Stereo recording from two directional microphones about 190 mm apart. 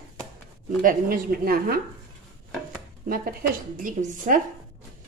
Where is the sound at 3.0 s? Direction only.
50° right (ahead or behind).